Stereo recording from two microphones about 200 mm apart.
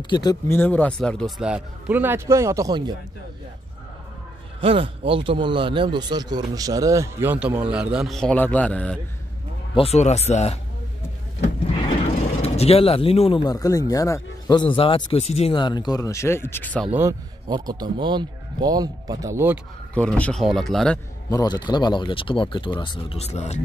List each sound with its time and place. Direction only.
0.1 s a man's voice: 20° left (ahead or behind); by 2.9 s 20° right (ahead or behind)
4.6 s a man's voice: 25° right (ahead or behind); by 9.0 s 5° left (ahead or behind)
9.8 s speech: 35° left (ahead or behind)
12.4 s speech: 30° left (ahead or behind); by 16.9 s 5° left (ahead or behind)
17.5 s a man's voice: 20° right (ahead or behind)
19.9 s a man's voice: 5° left (ahead or behind)
21.3 s speech: 20° left (ahead or behind)